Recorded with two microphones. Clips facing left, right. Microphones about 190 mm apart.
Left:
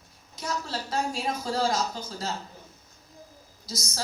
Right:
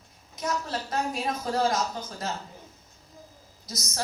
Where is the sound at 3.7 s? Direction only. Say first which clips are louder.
Right 1 dB; 30° left (ahead or behind).